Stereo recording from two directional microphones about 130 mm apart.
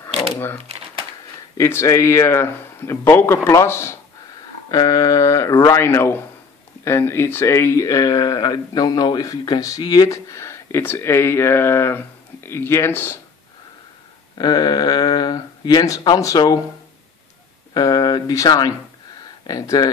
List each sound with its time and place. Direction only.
0.6 s crumpling: 50° right (ahead or behind)
1.6 s speech: 25° left (ahead or behind)
14.4 s speech: 30° left (ahead or behind)
17.7 s speech: 30° left (ahead or behind)